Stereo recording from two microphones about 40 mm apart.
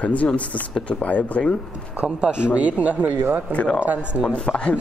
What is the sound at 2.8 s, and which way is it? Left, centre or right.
Speech, right.